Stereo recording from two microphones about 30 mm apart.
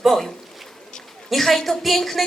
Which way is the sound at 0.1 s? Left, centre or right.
Left.